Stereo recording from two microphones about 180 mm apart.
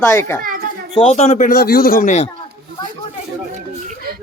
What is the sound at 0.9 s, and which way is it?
A man's voice, 35° left (ahead or behind).